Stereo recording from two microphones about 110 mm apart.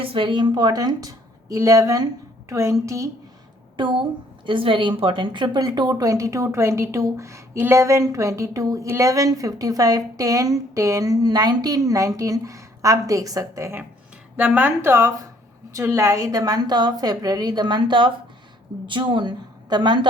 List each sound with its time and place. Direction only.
0.0 s a woman's voice: 55° right (ahead or behind); by 3.1 s 30° right (ahead or behind)
4.4 s a woman's voice: 50° right (ahead or behind); by 13.8 s 25° right (ahead or behind)
14.3 s a woman's voice: 15° right (ahead or behind); by 20.1 s 40° right (ahead or behind)